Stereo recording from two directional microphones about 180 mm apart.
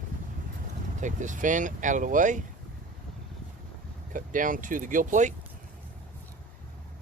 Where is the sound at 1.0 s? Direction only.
45° right (ahead or behind).